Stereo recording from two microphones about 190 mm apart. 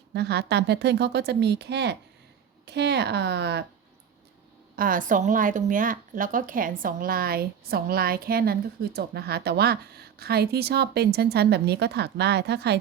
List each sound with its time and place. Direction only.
0.1 s a woman's voice: 60° right (ahead or behind)
4.8 s a woman's voice: 45° right (ahead or behind); by 12.8 s 60° right (ahead or behind)